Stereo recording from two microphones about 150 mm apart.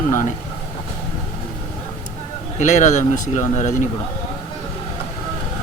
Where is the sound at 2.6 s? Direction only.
55° left (ahead or behind).